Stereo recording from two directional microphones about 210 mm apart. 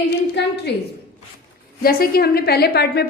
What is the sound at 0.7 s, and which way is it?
A woman's voice, 50° left (ahead or behind).